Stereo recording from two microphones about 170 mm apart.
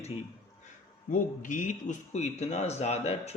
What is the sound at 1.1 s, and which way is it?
Speech, 50° left (ahead or behind).